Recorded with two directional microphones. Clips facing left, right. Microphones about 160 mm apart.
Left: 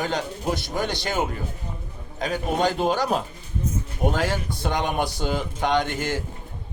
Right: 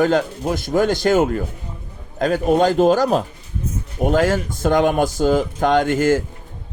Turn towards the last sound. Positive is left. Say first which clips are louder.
# right 8 dB
turn(degrees=-45)  # may be behind; listen again after turning